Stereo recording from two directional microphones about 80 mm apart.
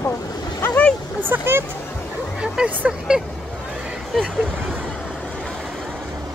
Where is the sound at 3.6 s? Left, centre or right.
Centre.